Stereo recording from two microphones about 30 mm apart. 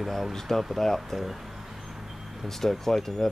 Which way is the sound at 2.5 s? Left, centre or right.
Centre.